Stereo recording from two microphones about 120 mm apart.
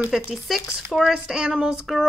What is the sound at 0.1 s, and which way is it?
Speech, centre (ahead or behind).